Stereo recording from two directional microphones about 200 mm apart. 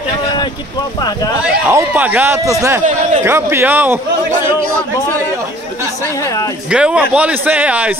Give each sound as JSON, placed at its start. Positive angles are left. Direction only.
{"t": 1.4, "sound": "speech", "side_deg": -10}
{"t": 2.8, "sound": "a man's voice", "side_deg": -35}
{"t": 3.3, "sound": "speech", "side_deg": -10}
{"t": 6.7, "sound": "speech", "side_deg": -5}